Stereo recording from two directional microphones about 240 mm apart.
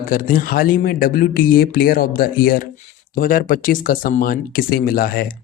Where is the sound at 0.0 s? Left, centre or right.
Left.